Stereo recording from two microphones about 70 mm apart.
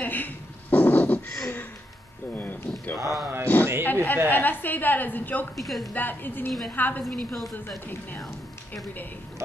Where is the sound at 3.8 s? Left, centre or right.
Left.